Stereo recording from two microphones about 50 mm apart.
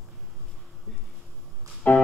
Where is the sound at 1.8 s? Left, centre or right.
Left.